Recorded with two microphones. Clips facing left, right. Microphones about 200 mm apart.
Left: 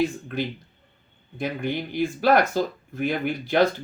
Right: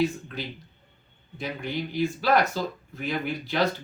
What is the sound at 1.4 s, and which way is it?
Speech, 50° left (ahead or behind).